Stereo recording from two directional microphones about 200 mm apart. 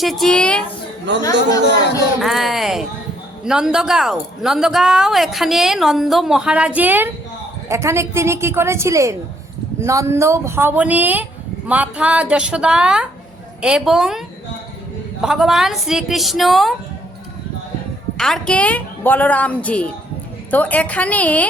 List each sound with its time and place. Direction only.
0.0 s speech: centre (ahead or behind)
1.1 s speech: 60° right (ahead or behind)
2.2 s a woman's voice: centre (ahead or behind)
18.2 s a woman's voice: 5° left (ahead or behind)